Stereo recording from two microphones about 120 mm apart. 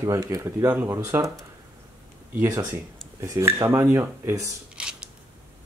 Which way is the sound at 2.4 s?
30° right (ahead or behind).